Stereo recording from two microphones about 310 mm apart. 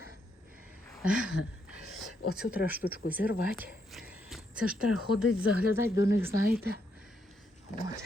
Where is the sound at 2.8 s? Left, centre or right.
Left.